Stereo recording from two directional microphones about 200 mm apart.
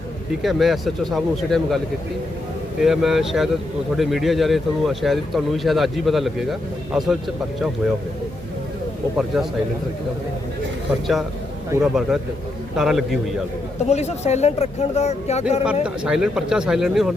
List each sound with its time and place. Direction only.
0.4 s speech: centre (ahead or behind)
2.8 s speech: centre (ahead or behind)
9.1 s speech: centre (ahead or behind)
11.0 s speech: centre (ahead or behind)
13.8 s speech: 35° left (ahead or behind)
15.6 s speech: 5° right (ahead or behind)